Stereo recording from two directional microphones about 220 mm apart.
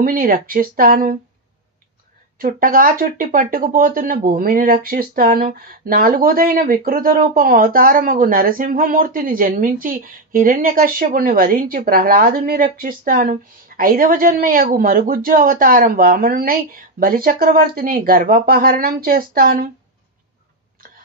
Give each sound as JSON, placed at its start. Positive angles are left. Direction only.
{"t": 0.0, "sound": "speech", "side_deg": -40}
{"t": 2.3, "sound": "speech", "side_deg": -40}